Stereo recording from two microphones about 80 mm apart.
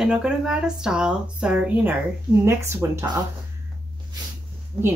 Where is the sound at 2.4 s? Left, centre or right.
Right.